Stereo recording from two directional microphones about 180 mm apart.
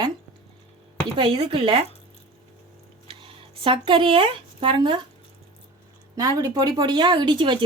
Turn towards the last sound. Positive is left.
turn(degrees=-25)  # may be behind; listen again after turning